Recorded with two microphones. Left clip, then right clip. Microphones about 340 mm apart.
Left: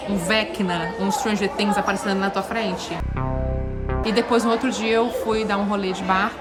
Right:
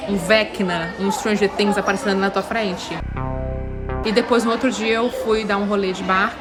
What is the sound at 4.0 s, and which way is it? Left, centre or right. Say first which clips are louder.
Speech: right 2 dB; centre.